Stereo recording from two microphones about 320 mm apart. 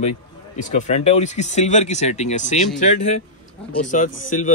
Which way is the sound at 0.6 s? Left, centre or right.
Left.